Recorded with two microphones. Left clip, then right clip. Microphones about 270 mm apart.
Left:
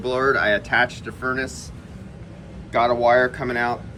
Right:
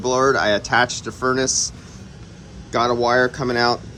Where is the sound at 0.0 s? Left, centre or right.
Centre.